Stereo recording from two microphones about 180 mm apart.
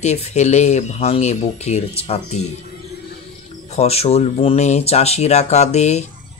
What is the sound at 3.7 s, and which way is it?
Speech, 35° left (ahead or behind).